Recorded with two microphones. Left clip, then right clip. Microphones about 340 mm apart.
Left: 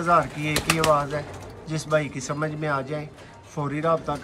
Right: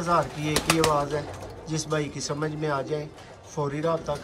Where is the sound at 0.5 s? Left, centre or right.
Right.